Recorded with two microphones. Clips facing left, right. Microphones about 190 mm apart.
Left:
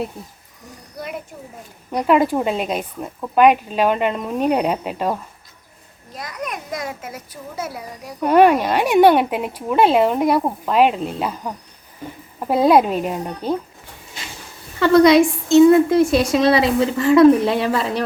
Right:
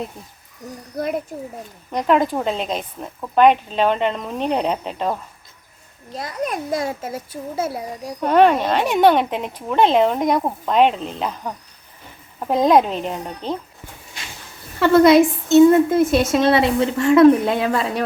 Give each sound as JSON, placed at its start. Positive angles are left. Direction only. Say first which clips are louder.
{"t": 1.9, "sound": "speech", "louder": "left 2 dB", "side_deg": 10}
{"t": 6.1, "sound": "a child's voice", "louder": "right 4 dB", "side_deg": -30}
{"t": 8.2, "sound": "speech", "louder": "left 1 dB", "side_deg": 10}
{"t": 14.8, "sound": "speech", "louder": "even", "side_deg": 0}